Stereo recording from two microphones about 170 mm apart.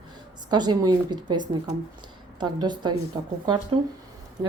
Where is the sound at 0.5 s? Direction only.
25° right (ahead or behind).